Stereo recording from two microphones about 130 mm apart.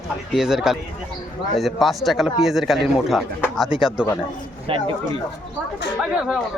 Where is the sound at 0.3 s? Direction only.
5° right (ahead or behind).